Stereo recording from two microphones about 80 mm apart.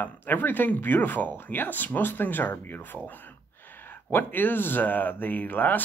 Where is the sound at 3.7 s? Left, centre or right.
Left.